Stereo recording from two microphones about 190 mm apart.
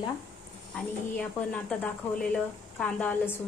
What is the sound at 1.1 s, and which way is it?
Speech, 5° left (ahead or behind).